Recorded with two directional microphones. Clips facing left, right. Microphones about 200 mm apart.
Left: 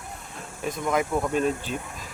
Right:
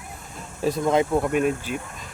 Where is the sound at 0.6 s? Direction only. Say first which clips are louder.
Right 5 dB; 30° right (ahead or behind).